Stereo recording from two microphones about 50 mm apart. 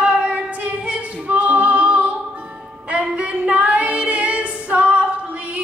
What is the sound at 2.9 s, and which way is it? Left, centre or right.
Female singing, right.